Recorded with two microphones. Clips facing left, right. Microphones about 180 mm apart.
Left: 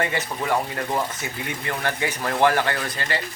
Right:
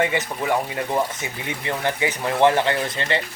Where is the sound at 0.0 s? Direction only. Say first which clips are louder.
Right 3 dB; 15° right (ahead or behind).